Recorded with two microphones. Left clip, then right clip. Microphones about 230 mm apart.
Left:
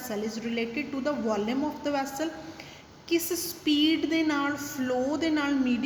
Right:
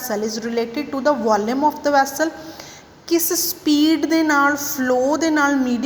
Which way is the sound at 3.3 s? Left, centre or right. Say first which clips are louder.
Right 8 dB; centre.